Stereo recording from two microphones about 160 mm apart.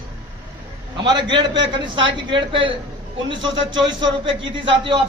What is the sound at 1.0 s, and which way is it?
A man's voice, 30° right (ahead or behind).